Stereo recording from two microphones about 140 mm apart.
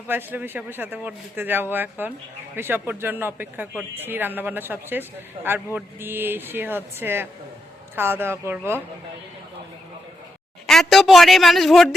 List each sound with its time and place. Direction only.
0.1 s speech: 15° right (ahead or behind)
10.7 s a man's voice: centre (ahead or behind)